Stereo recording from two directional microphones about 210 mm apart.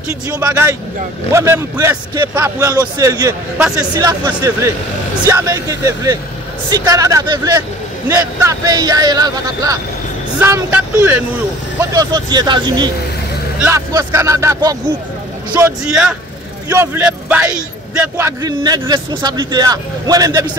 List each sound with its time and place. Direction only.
0.4 s a man's voice: 15° right (ahead or behind)